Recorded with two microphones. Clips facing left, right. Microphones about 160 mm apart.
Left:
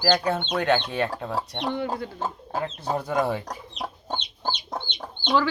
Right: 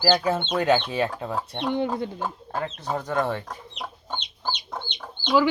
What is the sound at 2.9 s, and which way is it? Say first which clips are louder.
Speech: left 1 dB; 15° left (ahead or behind).